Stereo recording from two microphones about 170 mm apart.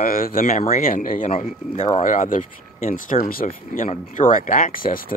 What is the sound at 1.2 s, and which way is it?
Speech, 45° left (ahead or behind).